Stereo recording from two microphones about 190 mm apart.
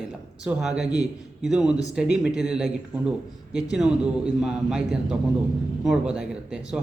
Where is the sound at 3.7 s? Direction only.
5° right (ahead or behind).